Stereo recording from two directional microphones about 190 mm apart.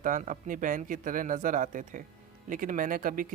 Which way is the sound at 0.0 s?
45° right (ahead or behind).